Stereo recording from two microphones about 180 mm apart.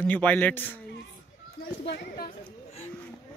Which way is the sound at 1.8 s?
60° left (ahead or behind).